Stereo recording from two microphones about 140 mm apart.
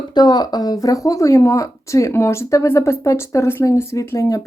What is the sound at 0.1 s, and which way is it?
Speech, 30° left (ahead or behind).